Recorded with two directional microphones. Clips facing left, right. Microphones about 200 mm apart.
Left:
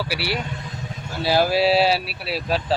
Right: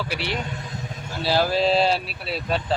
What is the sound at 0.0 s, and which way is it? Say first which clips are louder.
A man's voice: left 2 dB; 5° left (ahead or behind).